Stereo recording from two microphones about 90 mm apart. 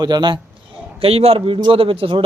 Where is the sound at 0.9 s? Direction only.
90° right.